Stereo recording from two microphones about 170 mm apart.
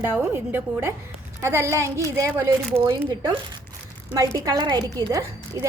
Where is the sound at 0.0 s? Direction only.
15° right (ahead or behind).